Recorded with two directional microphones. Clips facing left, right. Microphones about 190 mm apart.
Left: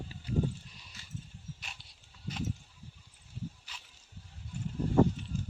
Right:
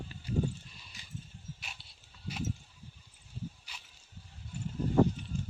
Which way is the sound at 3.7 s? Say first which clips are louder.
Even; 10° right (ahead or behind).